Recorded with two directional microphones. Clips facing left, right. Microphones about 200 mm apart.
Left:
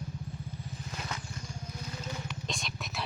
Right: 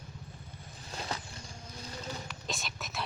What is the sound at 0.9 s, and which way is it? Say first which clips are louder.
Vehicle: right 3 dB; 30° right (ahead or behind).